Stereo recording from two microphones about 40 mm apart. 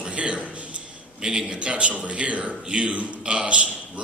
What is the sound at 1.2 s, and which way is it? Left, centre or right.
Speech, centre.